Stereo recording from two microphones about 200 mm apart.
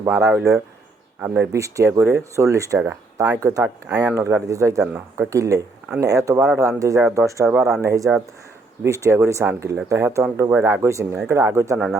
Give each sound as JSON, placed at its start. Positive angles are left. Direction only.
{"t": 0.0, "sound": "speech", "side_deg": -15}
{"t": 7.0, "sound": "speech", "side_deg": -5}
{"t": 7.8, "sound": "speech", "side_deg": -15}